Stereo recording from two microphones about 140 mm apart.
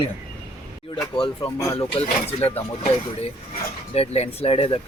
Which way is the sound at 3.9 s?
45° left (ahead or behind).